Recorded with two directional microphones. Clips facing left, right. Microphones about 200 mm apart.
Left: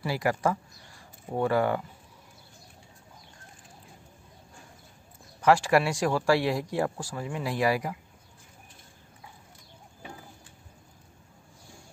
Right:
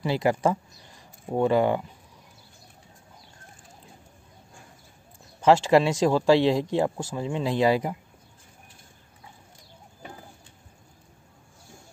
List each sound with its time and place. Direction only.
0.0 s speech: 20° right (ahead or behind)
5.4 s a man's voice: 25° right (ahead or behind)